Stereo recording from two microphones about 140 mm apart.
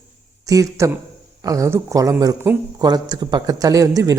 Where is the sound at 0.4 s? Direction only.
25° right (ahead or behind).